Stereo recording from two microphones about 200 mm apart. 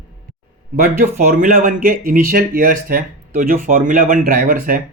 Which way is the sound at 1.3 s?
40° right (ahead or behind).